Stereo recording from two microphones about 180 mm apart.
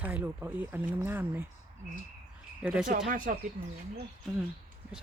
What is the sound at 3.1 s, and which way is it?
Speech, 45° right (ahead or behind).